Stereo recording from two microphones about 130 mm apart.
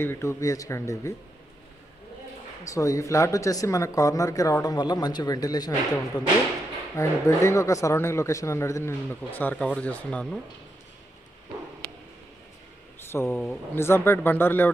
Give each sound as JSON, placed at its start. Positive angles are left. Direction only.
{"t": 0.0, "sound": "speech", "side_deg": 20}
{"t": 2.6, "sound": "speech", "side_deg": 25}
{"t": 7.0, "sound": "speech", "side_deg": 20}
{"t": 13.0, "sound": "speech", "side_deg": 20}